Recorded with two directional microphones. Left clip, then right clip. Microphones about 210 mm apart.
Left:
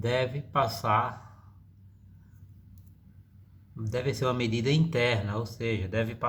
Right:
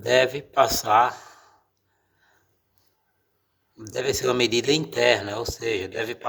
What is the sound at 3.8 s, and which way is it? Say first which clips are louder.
Speech: right 5 dB; 50° right (ahead or behind).